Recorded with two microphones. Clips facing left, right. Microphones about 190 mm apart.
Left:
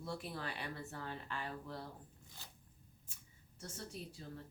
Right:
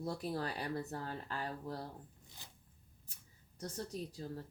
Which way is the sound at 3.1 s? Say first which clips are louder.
Left 1 dB; 35° right (ahead or behind).